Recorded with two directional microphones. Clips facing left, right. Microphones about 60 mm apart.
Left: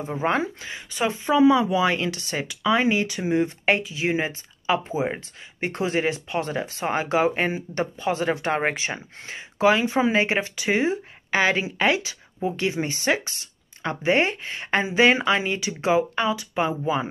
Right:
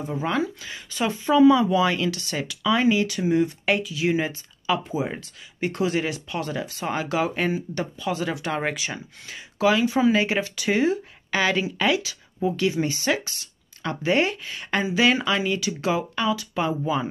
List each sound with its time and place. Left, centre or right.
0.0 s speech: left